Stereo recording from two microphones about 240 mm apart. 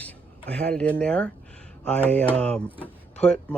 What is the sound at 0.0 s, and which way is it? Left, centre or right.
Speech, centre.